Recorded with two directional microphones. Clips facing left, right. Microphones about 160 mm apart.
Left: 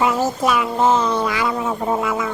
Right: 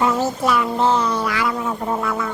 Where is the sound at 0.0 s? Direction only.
15° left (ahead or behind).